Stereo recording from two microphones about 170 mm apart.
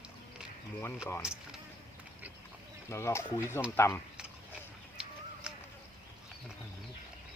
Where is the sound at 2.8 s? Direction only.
15° left (ahead or behind).